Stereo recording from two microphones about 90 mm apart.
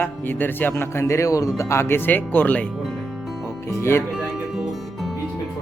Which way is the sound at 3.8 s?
30° left (ahead or behind).